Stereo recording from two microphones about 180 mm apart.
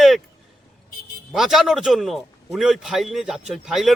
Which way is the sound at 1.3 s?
Centre (ahead or behind).